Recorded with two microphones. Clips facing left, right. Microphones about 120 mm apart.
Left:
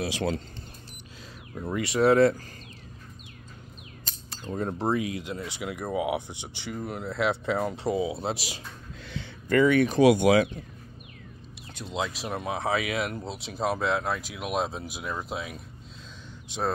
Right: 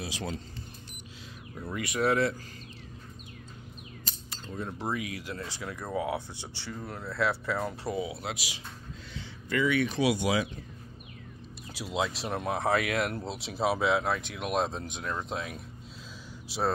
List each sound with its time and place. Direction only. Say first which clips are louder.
0.0 s speech: left 8 dB; 70° left (ahead or behind)
1.6 s speech: left 6 dB; 30° left (ahead or behind)
4.5 s speech: left 7 dB; 45° left (ahead or behind)
9.1 s speech: left 8 dB; 55° left (ahead or behind)
11.7 s speech: even; 5° right (ahead or behind)